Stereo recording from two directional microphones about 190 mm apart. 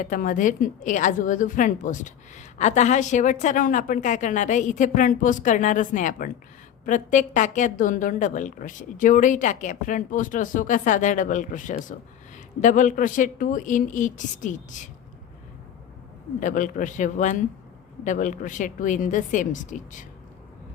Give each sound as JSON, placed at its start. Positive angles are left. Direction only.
{"t": 0.0, "sound": "a woman's voice", "side_deg": 45}
{"t": 16.4, "sound": "a woman's voice", "side_deg": 45}